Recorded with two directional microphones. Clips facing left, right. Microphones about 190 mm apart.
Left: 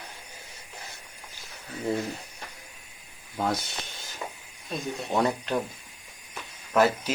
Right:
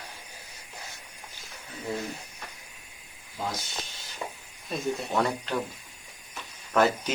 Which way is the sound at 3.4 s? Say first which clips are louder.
Left 6 dB; 60° left (ahead or behind).